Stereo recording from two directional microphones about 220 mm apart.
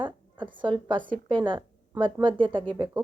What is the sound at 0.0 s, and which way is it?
A woman's voice, 20° right (ahead or behind).